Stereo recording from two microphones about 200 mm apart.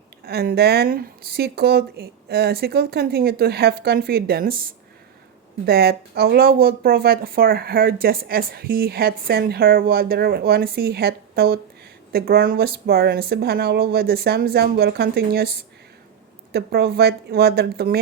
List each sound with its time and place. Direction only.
0.3 s speech: 50° right (ahead or behind)
5.6 s speech: 50° right (ahead or behind)